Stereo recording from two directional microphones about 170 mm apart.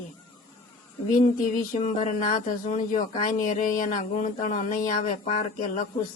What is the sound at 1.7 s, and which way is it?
Speech, 45° left (ahead or behind).